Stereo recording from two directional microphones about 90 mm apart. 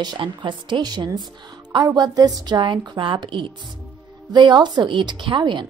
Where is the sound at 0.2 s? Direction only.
60° right (ahead or behind).